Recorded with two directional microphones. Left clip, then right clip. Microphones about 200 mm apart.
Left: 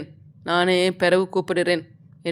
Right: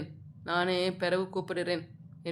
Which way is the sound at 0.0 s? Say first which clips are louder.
Left 8 dB; 35° left (ahead or behind).